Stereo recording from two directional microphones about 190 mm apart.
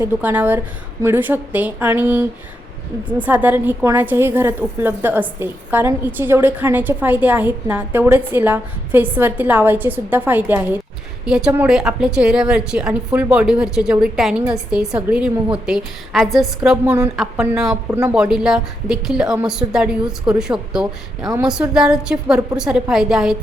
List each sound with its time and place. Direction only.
0.0 s a woman's voice: 10° right (ahead or behind)
3.2 s a woman's voice: 10° right (ahead or behind)